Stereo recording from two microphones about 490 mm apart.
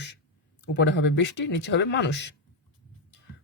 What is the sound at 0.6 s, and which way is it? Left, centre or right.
Speech, left.